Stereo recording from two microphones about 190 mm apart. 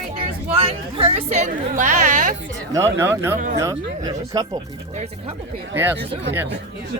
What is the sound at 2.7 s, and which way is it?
Speech, 15° right (ahead or behind).